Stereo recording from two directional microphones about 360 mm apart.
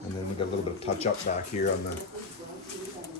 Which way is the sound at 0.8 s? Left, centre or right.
Centre.